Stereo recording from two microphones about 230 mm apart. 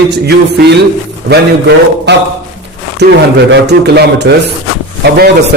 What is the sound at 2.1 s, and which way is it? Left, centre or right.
A man's voice, right.